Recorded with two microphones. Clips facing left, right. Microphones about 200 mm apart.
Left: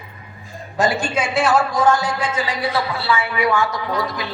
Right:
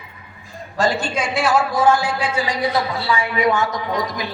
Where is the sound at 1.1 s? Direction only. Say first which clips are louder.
Left 1 dB; centre (ahead or behind).